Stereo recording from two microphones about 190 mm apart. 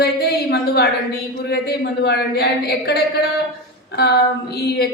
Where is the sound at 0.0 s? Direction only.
55° left (ahead or behind).